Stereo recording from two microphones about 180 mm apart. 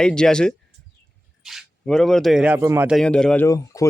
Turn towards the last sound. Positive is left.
turn(degrees=20)  # may be behind; listen again after turning